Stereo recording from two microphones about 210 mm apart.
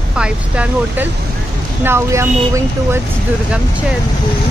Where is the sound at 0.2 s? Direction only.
5° right (ahead or behind).